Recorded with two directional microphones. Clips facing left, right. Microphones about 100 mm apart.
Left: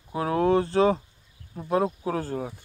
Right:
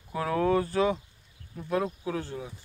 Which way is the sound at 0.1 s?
35° left (ahead or behind).